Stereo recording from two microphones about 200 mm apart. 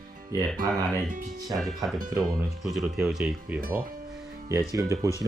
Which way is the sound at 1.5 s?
Centre (ahead or behind).